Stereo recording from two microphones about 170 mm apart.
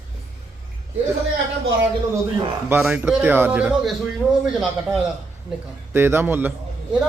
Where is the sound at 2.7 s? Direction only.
10° right (ahead or behind).